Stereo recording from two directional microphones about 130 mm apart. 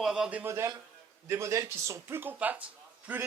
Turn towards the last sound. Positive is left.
turn(degrees=-10)  # may be behind; listen again after turning